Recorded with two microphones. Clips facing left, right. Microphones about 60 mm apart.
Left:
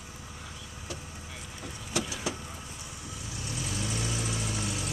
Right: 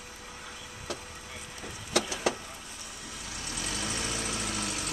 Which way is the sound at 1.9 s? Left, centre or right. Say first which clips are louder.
Right 3 dB; right.